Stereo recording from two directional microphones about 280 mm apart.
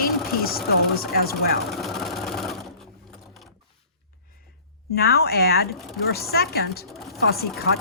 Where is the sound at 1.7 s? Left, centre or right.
Centre.